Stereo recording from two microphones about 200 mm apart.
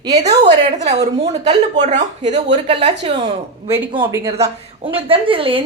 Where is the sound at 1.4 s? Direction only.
35° right (ahead or behind).